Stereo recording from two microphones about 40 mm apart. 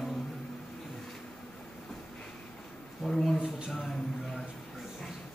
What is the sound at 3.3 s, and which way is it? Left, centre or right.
Speech, centre.